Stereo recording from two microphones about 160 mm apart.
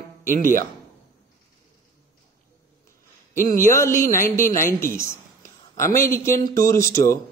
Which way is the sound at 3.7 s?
20° left (ahead or behind).